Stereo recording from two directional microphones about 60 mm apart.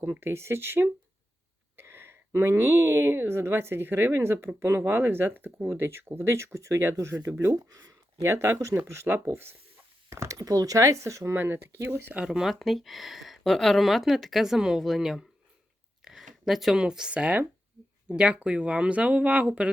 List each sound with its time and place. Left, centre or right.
0.1 s speech: right
7.3 s speech: right
8.2 s speech: right
10.1 s speech: right
10.3 s speech: right
10.8 s speech: right
11.3 s speech: right
12.2 s speech: centre
16.0 s a sound: centre
16.8 s speech: centre